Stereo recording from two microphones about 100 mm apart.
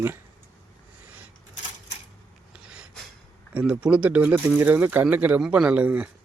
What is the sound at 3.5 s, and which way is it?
Speech, 10° right (ahead or behind).